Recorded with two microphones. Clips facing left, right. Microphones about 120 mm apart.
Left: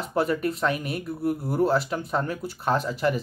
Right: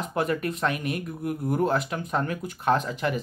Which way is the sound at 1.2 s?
5° left (ahead or behind).